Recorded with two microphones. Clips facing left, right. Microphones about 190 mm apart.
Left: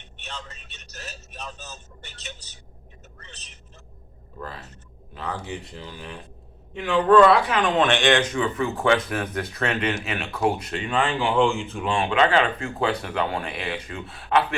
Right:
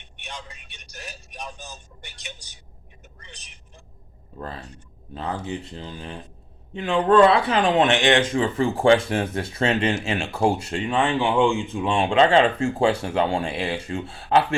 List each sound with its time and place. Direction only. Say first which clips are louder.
0.0 s a man's voice: even; 15° right (ahead or behind)
3.2 s vehicle: right 1 dB; 15° right (ahead or behind)
5.1 s speech: right 3 dB; 30° right (ahead or behind)